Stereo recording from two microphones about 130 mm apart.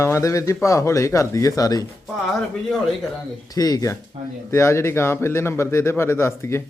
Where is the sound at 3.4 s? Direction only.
30° left (ahead or behind).